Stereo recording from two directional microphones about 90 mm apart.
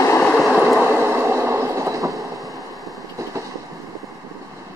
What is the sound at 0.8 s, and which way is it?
Train, 20° right (ahead or behind).